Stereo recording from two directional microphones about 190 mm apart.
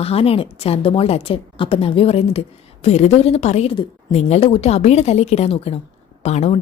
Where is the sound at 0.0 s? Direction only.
30° left (ahead or behind).